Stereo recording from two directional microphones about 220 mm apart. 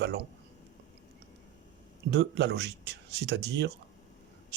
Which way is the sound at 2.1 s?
50° right (ahead or behind).